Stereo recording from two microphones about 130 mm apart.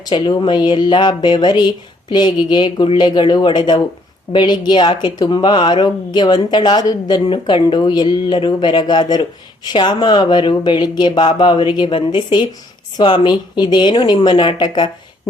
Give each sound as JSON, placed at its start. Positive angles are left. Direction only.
{"t": 0.0, "sound": "speech", "side_deg": 35}